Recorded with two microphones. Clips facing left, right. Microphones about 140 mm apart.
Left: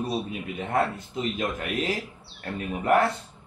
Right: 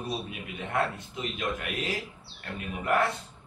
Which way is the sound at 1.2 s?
35° left (ahead or behind).